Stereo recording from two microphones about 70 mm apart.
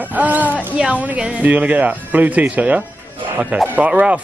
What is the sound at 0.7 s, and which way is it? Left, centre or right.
Speech, centre.